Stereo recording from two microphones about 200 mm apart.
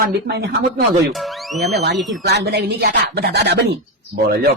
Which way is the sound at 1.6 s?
55° right (ahead or behind).